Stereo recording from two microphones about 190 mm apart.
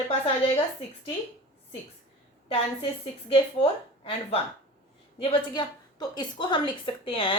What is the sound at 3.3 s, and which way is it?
A woman's voice, 30° left (ahead or behind).